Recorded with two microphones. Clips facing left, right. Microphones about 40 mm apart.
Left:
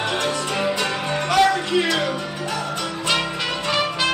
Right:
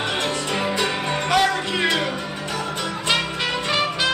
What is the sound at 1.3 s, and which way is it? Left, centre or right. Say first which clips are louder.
Music: left 3 dB; right.